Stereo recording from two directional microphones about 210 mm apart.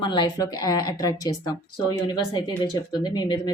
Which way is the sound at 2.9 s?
20° left (ahead or behind).